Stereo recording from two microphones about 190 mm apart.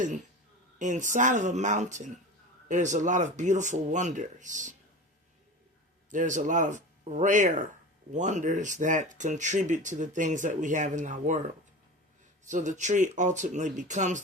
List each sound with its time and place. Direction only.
0.8 s speech: 40° right (ahead or behind)
6.1 s speech: 40° right (ahead or behind)
12.5 s speech: 40° right (ahead or behind)